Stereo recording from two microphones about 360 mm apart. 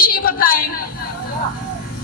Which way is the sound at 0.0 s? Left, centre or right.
Left.